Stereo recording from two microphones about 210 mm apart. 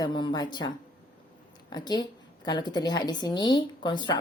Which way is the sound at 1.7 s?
20° left (ahead or behind).